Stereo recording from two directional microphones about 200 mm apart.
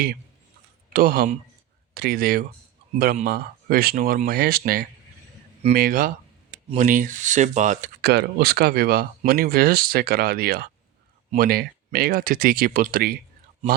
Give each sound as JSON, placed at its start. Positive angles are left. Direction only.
{"t": 0.9, "sound": "speech", "side_deg": -50}
{"t": 8.0, "sound": "speech", "side_deg": -55}